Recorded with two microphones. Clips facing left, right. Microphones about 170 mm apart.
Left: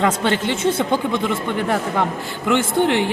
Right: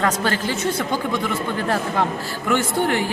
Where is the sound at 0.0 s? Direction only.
25° left (ahead or behind).